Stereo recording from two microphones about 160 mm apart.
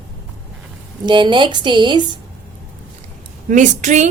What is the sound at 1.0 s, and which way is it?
Speech, 30° right (ahead or behind).